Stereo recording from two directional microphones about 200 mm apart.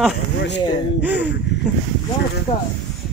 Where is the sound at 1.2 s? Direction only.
60° left (ahead or behind).